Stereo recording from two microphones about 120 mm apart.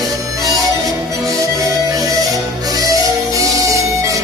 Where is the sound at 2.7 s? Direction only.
30° right (ahead or behind).